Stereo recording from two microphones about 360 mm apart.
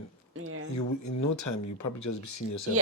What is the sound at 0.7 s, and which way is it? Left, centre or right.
Speech, left.